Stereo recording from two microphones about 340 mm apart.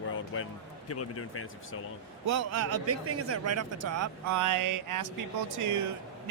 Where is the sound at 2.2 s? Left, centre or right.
Right.